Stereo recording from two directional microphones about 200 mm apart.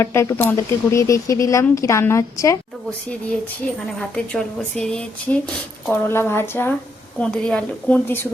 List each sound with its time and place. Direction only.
0.0 s speech: 15° left (ahead or behind)
4.1 s speech: 5° left (ahead or behind)